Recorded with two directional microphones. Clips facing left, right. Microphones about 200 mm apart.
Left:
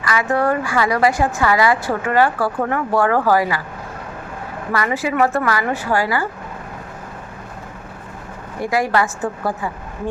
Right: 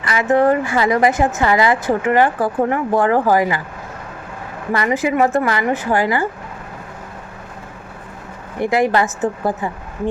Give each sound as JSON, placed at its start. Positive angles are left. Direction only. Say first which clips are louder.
{"t": 0.0, "sound": "speech", "louder": "right 4 dB", "side_deg": -25}
{"t": 4.7, "sound": "speech", "louder": "right 3 dB", "side_deg": -20}
{"t": 8.6, "sound": "speech", "louder": "right 3 dB", "side_deg": -20}